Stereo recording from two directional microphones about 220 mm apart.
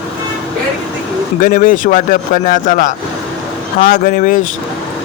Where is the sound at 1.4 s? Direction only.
40° left (ahead or behind).